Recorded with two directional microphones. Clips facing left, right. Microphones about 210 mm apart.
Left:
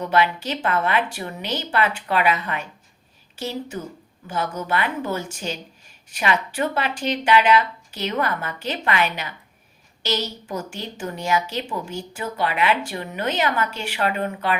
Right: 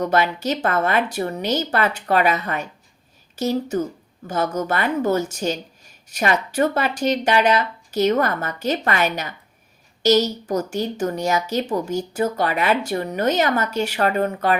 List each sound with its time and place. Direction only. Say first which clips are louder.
0.0 s a woman's voice: right 1 dB; 45° right (ahead or behind)